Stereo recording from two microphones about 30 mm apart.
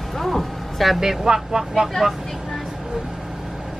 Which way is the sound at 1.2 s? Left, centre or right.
Centre.